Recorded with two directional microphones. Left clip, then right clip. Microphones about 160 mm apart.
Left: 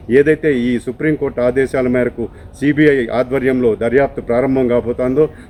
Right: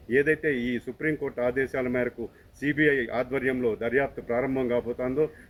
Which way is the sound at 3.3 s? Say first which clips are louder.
Left 12 dB; 20° left (ahead or behind).